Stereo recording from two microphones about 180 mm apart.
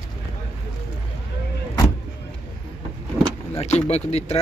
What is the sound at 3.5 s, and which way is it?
Speech, 35° left (ahead or behind).